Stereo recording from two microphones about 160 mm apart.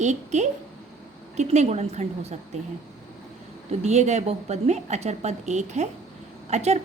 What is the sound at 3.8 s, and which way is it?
A woman's voice, 45° right (ahead or behind).